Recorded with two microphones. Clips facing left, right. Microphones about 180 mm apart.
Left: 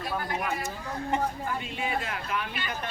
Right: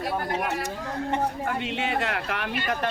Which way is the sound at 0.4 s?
75° right (ahead or behind).